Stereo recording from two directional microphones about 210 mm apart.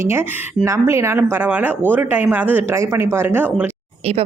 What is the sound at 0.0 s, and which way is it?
A woman's voice, 10° right (ahead or behind).